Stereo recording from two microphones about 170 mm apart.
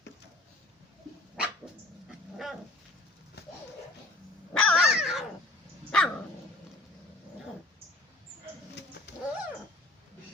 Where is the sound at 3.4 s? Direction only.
70° left (ahead or behind).